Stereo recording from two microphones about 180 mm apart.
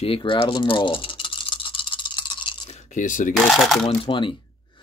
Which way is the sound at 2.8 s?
45° left (ahead or behind).